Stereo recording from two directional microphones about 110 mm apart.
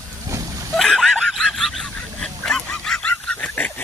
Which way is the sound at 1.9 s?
5° left (ahead or behind).